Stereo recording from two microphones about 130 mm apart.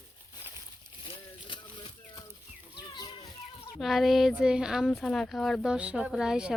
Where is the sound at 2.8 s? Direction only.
35° left (ahead or behind).